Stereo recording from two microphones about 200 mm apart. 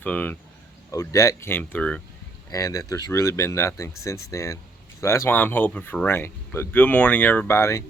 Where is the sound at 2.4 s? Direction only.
15° left (ahead or behind).